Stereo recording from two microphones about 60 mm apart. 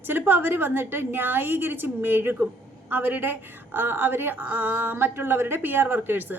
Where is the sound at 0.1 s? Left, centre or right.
Right.